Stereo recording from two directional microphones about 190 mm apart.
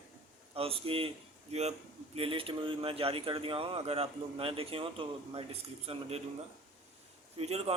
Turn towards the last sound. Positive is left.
turn(degrees=-30)  # may be behind; listen again after turning